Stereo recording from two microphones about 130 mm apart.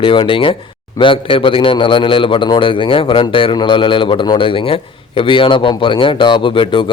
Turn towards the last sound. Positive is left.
turn(degrees=40)  # may be behind; listen again after turning